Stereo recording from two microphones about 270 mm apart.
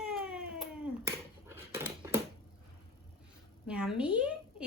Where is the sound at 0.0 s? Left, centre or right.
Centre.